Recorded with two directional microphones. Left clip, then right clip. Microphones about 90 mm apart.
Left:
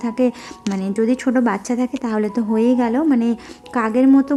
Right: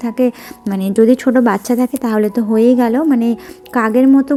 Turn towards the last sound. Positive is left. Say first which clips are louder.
# right 5 dB
turn(degrees=-40)  # may be behind; listen again after turning